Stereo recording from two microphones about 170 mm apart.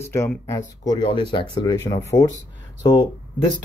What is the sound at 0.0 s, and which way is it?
Speech, 15° left (ahead or behind).